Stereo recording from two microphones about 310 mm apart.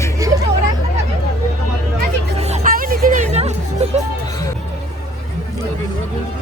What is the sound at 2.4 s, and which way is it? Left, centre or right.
Music, right.